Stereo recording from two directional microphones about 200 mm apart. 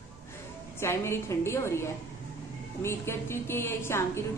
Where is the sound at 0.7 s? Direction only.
10° left (ahead or behind).